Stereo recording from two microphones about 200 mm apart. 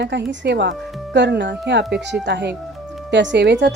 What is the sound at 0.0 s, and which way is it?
Speech, 60° right (ahead or behind).